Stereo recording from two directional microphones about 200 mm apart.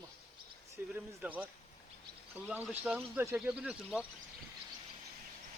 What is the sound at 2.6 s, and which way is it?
Speech, 10° right (ahead or behind).